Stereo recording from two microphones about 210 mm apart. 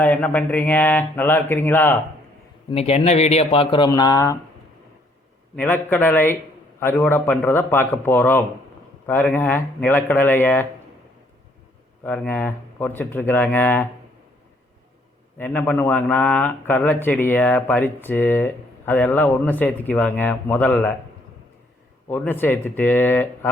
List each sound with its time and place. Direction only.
0.0 s a man's voice: 10° left (ahead or behind)
2.6 s speech: 30° left (ahead or behind)
5.5 s a man's voice: 10° left (ahead or behind)
12.0 s a man's voice: 5° left (ahead or behind)
15.4 s a man's voice: 5° left (ahead or behind)
22.1 s a man's voice: 10° left (ahead or behind)